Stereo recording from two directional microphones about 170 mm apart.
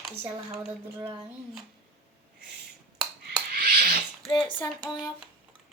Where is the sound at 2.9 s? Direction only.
5° right (ahead or behind).